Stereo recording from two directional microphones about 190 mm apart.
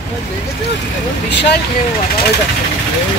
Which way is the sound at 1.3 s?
65° left (ahead or behind).